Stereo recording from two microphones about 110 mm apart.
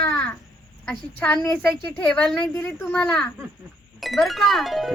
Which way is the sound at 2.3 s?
Centre (ahead or behind).